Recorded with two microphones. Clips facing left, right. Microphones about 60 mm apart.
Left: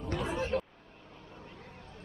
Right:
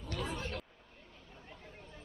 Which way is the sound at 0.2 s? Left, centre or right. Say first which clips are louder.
Left 4 dB; centre.